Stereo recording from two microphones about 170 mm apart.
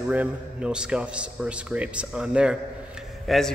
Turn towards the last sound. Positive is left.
turn(degrees=0)  # may be behind; listen again after turning